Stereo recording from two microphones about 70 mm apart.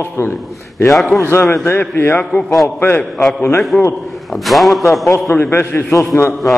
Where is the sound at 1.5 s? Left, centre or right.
Left.